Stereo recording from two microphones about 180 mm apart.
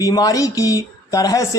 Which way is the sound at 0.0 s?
20° left (ahead or behind).